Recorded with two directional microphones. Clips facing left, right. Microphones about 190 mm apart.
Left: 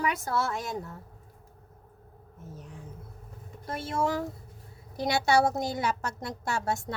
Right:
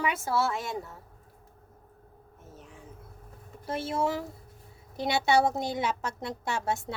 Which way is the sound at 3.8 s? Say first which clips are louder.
Left 1 dB; 5° right (ahead or behind).